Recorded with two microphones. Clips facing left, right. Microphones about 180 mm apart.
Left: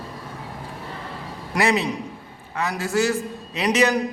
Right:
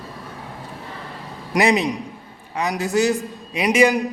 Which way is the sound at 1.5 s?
15° right (ahead or behind).